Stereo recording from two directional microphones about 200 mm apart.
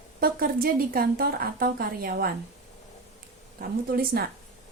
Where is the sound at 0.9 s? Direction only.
45° right (ahead or behind).